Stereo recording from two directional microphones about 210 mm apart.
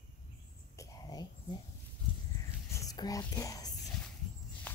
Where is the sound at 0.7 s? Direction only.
15° left (ahead or behind).